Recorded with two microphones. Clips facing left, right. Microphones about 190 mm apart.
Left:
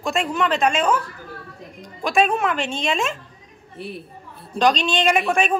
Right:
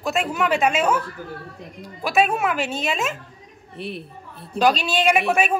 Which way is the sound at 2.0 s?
5° right (ahead or behind).